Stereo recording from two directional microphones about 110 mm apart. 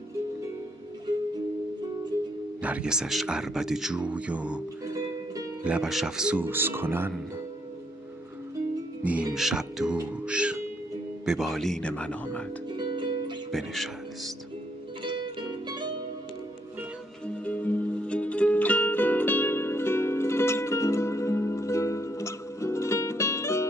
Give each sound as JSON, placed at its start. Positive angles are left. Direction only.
{"t": 2.6, "sound": "speech", "side_deg": -10}
{"t": 9.0, "sound": "speech", "side_deg": -10}
{"t": 12.6, "sound": "music", "side_deg": -45}
{"t": 13.5, "sound": "speech", "side_deg": 0}
{"t": 15.0, "sound": "music", "side_deg": -45}
{"t": 17.3, "sound": "music", "side_deg": 15}